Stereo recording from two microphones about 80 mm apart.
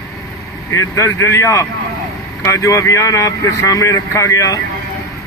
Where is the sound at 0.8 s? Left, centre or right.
Left.